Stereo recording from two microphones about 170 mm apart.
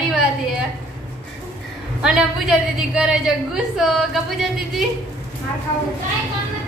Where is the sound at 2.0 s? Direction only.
5° right (ahead or behind).